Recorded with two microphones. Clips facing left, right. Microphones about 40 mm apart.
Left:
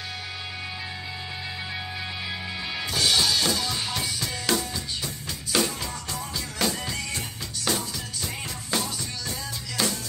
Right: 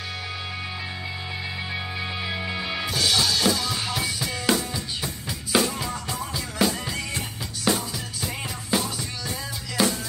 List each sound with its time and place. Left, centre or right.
1.7 s music: centre
2.9 s drum kit: centre
5.5 s music: centre